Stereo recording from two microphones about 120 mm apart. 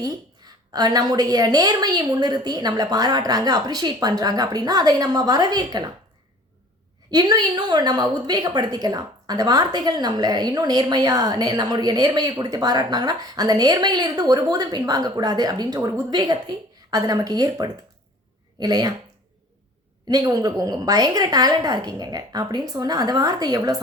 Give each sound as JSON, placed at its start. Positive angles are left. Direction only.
{"t": 0.0, "sound": "a woman's voice", "side_deg": -30}
{"t": 7.1, "sound": "a woman's voice", "side_deg": -35}
{"t": 20.1, "sound": "a woman's voice", "side_deg": -30}